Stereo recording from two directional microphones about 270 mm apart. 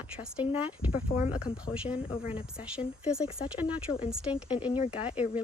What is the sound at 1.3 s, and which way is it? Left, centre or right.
A woman's voice, centre.